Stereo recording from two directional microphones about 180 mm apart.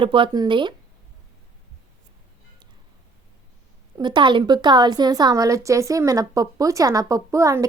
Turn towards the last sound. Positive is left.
turn(degrees=-15)  # may be behind; listen again after turning